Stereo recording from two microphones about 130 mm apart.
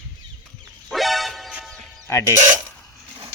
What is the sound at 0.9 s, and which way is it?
Music, centre (ahead or behind).